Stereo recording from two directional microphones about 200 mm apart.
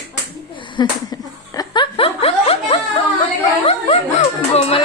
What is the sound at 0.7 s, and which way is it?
Snicker, 20° left (ahead or behind).